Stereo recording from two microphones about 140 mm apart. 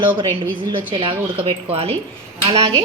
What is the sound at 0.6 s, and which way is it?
Speech, 35° right (ahead or behind).